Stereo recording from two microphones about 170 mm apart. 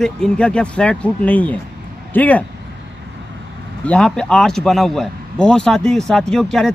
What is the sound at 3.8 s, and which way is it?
A man's voice, 5° left (ahead or behind).